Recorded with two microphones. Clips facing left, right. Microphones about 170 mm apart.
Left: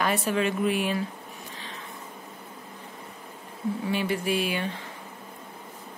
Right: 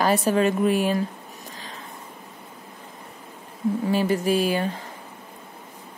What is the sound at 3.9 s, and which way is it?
Speech, 40° right (ahead or behind).